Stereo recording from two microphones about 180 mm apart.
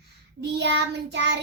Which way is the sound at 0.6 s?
75° right (ahead or behind).